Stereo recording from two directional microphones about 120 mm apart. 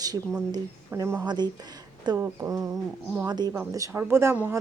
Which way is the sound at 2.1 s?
25° right (ahead or behind).